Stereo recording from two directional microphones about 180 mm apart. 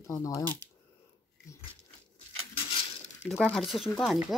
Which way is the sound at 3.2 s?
Centre (ahead or behind).